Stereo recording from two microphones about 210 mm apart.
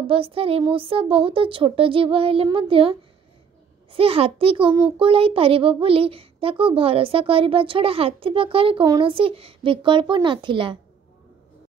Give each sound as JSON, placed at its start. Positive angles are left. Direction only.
{"t": 0.0, "sound": "a child's voice", "side_deg": -25}